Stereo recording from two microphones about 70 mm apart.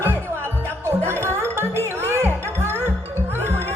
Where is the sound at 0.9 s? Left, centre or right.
Right.